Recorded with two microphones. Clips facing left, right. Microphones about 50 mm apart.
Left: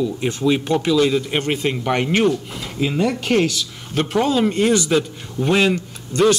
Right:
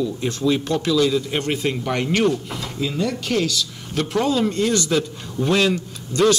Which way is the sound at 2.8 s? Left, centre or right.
Left.